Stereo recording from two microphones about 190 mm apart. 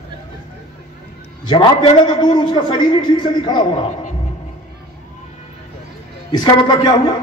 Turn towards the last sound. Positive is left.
turn(degrees=20)  # may be behind; listen again after turning